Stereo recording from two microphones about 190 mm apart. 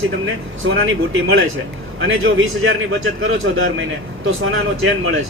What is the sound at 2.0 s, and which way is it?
Speech, 90° right.